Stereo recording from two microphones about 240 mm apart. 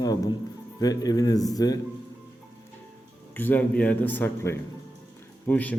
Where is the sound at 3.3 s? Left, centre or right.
Centre.